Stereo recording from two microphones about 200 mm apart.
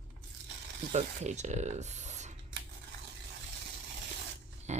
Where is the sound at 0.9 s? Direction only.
35° right (ahead or behind).